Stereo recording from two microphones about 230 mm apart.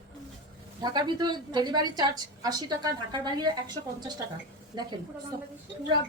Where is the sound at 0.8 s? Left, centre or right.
Centre.